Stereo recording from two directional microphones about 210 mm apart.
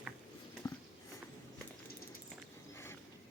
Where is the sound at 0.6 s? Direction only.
20° left (ahead or behind).